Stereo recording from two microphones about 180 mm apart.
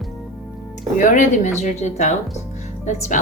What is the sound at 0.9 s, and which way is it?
Speech, 45° left (ahead or behind).